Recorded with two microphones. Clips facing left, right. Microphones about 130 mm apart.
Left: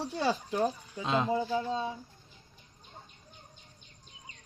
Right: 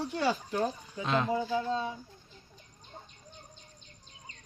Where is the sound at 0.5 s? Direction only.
15° left (ahead or behind).